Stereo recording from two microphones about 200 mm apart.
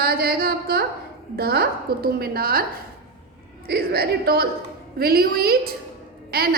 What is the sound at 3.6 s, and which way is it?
A woman's voice, 50° right (ahead or behind).